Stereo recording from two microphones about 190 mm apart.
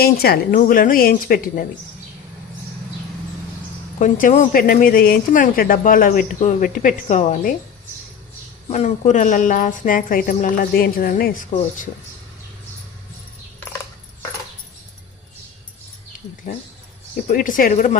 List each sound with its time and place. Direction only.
0.0 s speech: 55° left (ahead or behind)
4.0 s speech: 40° left (ahead or behind)
8.7 s speech: 35° left (ahead or behind)
17.2 s speech: 45° left (ahead or behind)